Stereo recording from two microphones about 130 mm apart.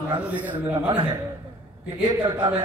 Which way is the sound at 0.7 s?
30° right (ahead or behind).